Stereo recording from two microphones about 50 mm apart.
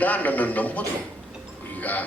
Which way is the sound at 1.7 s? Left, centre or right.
Left.